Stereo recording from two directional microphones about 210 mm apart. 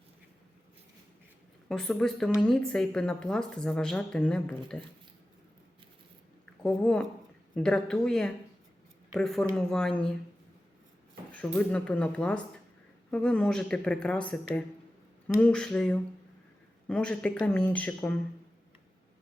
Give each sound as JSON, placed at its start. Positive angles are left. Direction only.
{"t": 1.6, "sound": "a woman's voice", "side_deg": 5}
{"t": 6.6, "sound": "a woman's voice", "side_deg": 5}
{"t": 11.3, "sound": "a woman's voice", "side_deg": 5}